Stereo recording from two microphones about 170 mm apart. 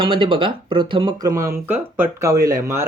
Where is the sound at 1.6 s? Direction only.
10° right (ahead or behind).